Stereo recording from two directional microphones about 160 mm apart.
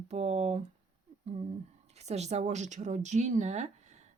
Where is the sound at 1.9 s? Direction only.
45° right (ahead or behind).